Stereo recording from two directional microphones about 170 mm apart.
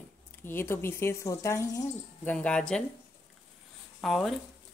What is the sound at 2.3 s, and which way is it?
Speech, 5° left (ahead or behind).